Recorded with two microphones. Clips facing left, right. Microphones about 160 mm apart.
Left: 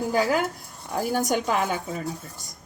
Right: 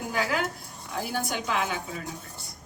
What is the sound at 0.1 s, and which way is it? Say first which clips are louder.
A woman's voice: left 4 dB; 40° left (ahead or behind).